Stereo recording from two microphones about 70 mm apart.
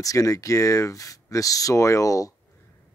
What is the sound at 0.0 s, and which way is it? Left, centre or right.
Speech, left.